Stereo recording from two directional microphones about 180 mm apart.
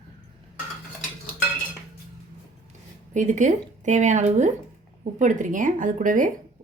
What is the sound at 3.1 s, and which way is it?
Speech, 45° right (ahead or behind).